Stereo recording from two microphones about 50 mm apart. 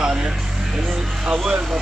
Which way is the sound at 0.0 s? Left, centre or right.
Centre.